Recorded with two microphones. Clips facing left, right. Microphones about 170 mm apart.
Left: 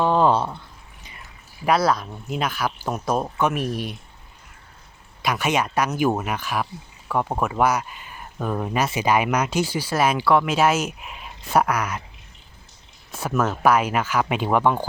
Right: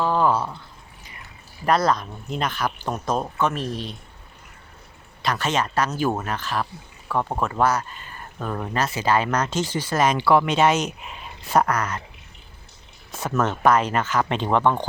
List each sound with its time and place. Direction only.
0.0 s a sound: 25° left (ahead or behind)
1.6 s speech: 5° left (ahead or behind)
5.2 s speech: 10° left (ahead or behind)
13.1 s speech: 10° left (ahead or behind)